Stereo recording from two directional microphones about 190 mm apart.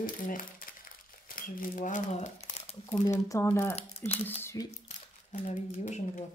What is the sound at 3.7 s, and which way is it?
Speech, 30° left (ahead or behind).